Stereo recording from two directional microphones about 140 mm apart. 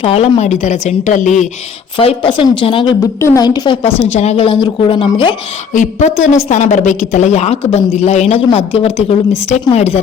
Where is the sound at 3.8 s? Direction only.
45° left (ahead or behind).